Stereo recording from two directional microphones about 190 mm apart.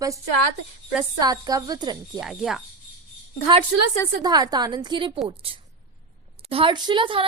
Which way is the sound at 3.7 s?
90° right.